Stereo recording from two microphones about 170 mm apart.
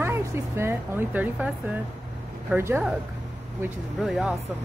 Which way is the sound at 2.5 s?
10° right (ahead or behind).